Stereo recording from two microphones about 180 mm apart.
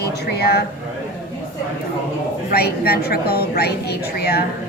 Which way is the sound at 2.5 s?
60° left (ahead or behind).